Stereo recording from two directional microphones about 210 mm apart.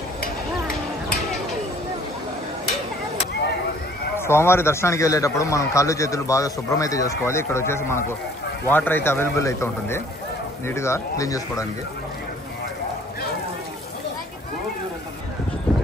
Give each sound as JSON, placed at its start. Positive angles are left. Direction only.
{"t": 4.2, "sound": "a man's voice", "side_deg": 10}